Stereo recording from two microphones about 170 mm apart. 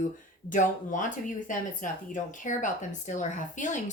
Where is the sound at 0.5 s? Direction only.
50° left (ahead or behind).